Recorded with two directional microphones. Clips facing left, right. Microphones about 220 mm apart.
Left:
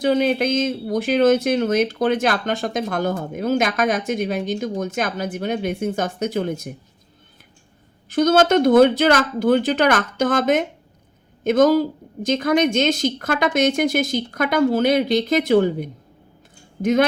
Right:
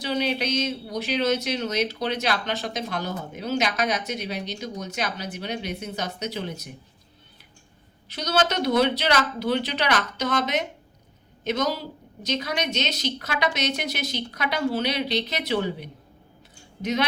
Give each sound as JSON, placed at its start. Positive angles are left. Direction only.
{"t": 0.0, "sound": "speech", "side_deg": 50}
{"t": 8.1, "sound": "speech", "side_deg": 50}